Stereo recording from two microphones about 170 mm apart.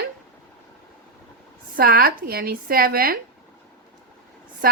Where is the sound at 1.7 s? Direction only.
60° right (ahead or behind).